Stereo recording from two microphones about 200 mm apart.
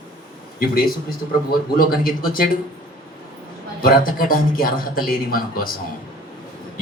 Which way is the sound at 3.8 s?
45° left (ahead or behind).